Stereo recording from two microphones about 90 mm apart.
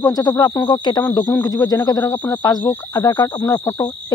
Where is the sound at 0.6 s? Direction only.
55° left (ahead or behind).